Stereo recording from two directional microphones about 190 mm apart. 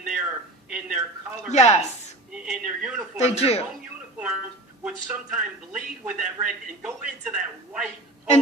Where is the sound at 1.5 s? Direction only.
35° left (ahead or behind).